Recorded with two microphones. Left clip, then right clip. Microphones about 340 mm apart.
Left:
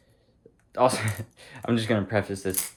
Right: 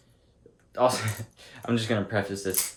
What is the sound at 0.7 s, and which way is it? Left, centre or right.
Speech, centre.